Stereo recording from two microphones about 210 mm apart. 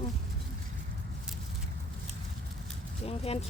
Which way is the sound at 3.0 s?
30° left (ahead or behind).